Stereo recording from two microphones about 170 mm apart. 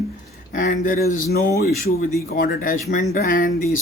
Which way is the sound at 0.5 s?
50° left (ahead or behind).